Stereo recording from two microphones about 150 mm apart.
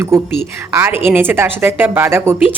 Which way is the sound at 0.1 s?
15° right (ahead or behind).